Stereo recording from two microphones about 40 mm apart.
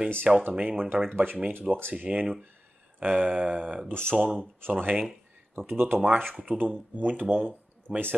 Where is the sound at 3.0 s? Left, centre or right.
Right.